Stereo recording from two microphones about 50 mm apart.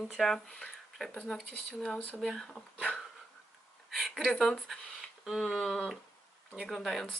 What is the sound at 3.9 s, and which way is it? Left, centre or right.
Speech, centre.